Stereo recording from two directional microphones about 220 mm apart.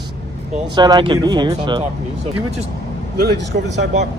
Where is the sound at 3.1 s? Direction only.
45° right (ahead or behind).